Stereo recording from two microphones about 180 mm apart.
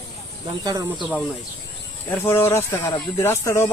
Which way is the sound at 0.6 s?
20° right (ahead or behind).